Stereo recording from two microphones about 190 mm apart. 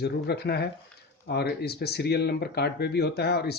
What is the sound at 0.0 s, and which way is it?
Speech, 60° left (ahead or behind).